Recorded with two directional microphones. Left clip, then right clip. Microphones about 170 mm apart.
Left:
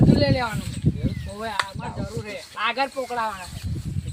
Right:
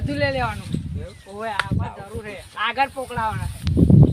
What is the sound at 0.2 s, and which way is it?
Speech, centre (ahead or behind).